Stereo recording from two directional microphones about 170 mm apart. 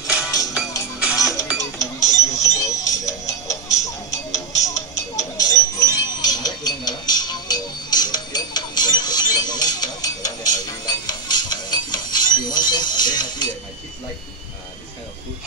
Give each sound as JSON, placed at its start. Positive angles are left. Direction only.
{"t": 0.0, "sound": "music", "side_deg": -5}
{"t": 0.3, "sound": "music", "side_deg": 20}
{"t": 1.6, "sound": "music", "side_deg": 20}